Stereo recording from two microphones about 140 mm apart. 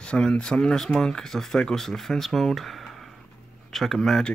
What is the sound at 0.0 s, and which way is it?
Speech, 5° left (ahead or behind).